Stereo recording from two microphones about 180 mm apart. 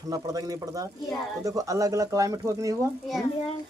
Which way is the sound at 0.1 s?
20° right (ahead or behind).